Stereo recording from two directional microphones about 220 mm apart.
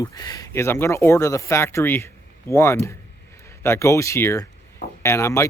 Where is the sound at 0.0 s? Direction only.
15° left (ahead or behind).